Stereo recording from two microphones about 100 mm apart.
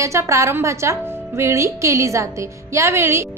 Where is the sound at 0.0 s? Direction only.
30° right (ahead or behind).